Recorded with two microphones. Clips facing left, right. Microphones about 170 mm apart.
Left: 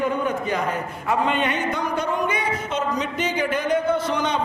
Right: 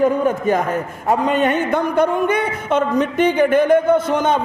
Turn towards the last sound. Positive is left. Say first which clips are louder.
# right 7 dB
turn(degrees=-50)  # may be behind; listen again after turning